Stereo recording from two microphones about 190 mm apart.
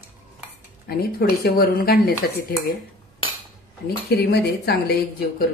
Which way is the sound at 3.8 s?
55° left (ahead or behind).